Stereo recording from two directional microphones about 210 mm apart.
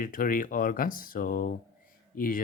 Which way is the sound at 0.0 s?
40° left (ahead or behind).